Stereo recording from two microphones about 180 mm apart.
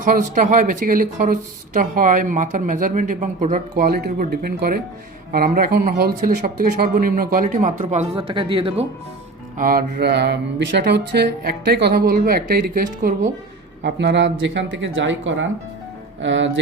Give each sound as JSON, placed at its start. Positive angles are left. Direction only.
{"t": 0.0, "sound": "speech", "side_deg": -45}
{"t": 9.6, "sound": "speech", "side_deg": -55}
{"t": 13.8, "sound": "speech", "side_deg": -80}